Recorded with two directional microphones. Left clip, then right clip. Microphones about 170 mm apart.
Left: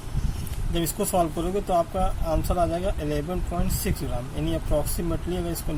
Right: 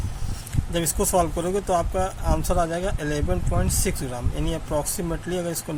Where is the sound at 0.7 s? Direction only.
60° right (ahead or behind).